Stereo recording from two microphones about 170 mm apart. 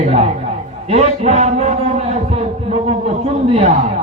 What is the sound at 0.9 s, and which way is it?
Speech, 40° right (ahead or behind).